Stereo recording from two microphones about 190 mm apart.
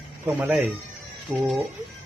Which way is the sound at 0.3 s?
10° right (ahead or behind).